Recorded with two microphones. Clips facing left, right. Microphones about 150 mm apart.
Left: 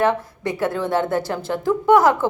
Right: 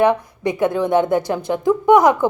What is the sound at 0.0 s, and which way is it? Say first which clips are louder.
A woman's voice: right 4 dB; 15° right (ahead or behind).